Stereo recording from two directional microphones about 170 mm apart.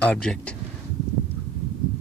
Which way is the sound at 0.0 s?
5° left (ahead or behind).